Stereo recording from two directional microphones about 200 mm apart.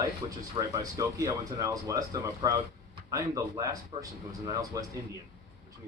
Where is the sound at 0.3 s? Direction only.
20° right (ahead or behind).